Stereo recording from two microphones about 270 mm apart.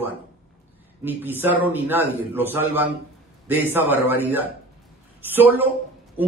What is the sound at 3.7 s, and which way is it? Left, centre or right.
A man's voice, centre.